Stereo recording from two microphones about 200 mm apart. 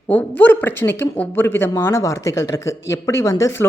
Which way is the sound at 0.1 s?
10° left (ahead or behind).